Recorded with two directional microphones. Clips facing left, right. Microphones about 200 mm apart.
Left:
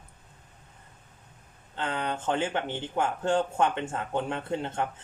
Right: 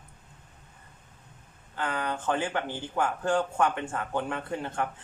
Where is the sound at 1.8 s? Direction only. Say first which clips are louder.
Even; 20° left (ahead or behind).